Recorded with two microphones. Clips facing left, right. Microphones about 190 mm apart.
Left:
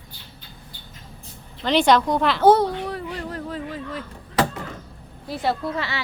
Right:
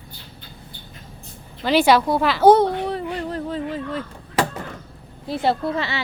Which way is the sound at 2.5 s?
20° right (ahead or behind).